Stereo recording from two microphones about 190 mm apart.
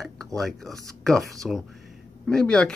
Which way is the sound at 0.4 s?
Centre (ahead or behind).